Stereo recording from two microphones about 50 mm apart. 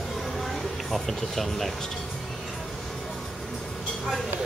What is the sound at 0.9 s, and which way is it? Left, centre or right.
Speech, centre.